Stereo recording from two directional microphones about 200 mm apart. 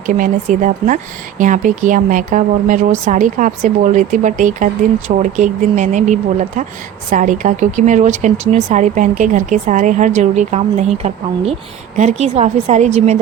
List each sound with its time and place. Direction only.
0.0 s speech: 40° right (ahead or behind)